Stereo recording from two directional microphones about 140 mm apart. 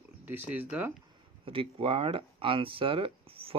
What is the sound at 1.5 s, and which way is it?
Speech, 40° right (ahead or behind).